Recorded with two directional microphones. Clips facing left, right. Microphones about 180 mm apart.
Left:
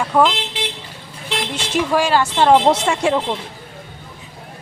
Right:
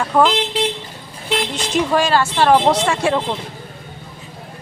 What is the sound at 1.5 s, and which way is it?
Speech, 10° left (ahead or behind).